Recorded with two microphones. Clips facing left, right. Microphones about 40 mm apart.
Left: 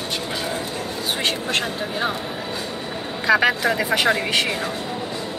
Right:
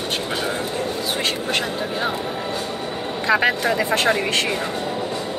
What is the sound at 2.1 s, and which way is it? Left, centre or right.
Vehicle, centre.